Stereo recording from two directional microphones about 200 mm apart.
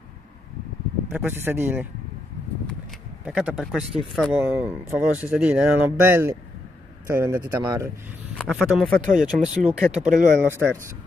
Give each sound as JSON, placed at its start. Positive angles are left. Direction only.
{"t": 1.1, "sound": "speech", "side_deg": -10}
{"t": 3.3, "sound": "speech", "side_deg": 0}
{"t": 8.5, "sound": "speech", "side_deg": 0}
{"t": 9.9, "sound": "speech", "side_deg": -40}
{"t": 10.5, "sound": "speech", "side_deg": -10}